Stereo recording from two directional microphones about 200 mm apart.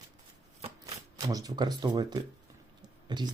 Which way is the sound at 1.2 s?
15° right (ahead or behind).